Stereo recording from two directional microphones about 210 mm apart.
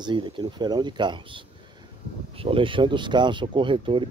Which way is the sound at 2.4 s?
25° right (ahead or behind).